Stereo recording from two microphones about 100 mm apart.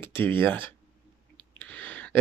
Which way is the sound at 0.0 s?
20° left (ahead or behind).